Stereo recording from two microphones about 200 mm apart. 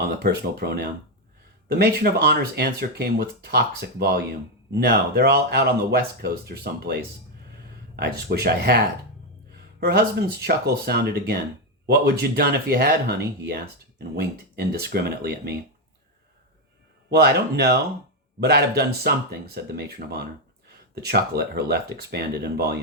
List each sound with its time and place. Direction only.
0.2 s speech: 50° right (ahead or behind)
9.8 s speech: 50° right (ahead or behind)
17.1 s speech: 50° right (ahead or behind)